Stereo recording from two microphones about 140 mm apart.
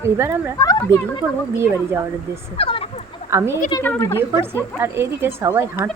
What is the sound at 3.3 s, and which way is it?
Speech, 20° right (ahead or behind).